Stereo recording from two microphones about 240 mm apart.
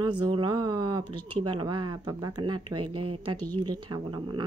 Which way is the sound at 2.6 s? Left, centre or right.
Right.